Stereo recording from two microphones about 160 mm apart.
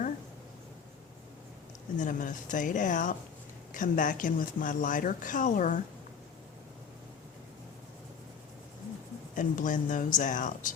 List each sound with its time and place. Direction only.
2.0 s speech: 50° left (ahead or behind)
9.3 s speech: 55° left (ahead or behind)